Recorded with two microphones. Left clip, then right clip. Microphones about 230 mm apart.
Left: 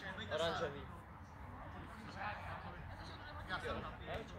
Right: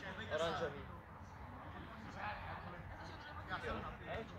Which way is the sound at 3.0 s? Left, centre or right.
Left.